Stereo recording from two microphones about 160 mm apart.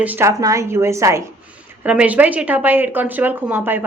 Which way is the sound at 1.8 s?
10° right (ahead or behind).